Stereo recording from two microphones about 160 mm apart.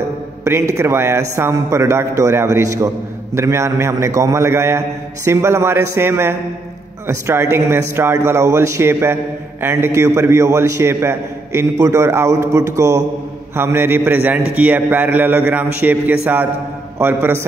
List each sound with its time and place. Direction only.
0.4 s a man's voice: 15° right (ahead or behind)